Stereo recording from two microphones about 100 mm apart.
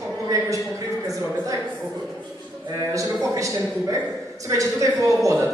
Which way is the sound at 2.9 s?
35° right (ahead or behind).